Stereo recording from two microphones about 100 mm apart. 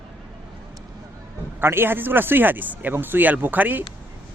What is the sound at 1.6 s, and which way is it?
Speech, 25° right (ahead or behind).